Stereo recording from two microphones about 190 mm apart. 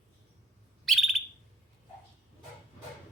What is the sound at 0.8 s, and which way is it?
Bird, centre (ahead or behind).